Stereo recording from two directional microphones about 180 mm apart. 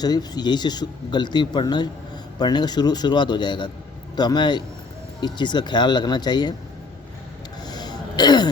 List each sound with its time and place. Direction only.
0.0 s speech: 20° left (ahead or behind)
7.6 s throat clearing: 25° left (ahead or behind)